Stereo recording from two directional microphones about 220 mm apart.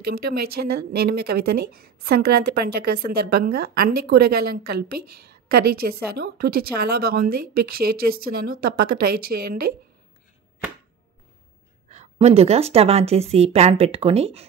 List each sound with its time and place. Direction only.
0.1 s speech: 45° right (ahead or behind)
11.9 s a woman's voice: 30° right (ahead or behind)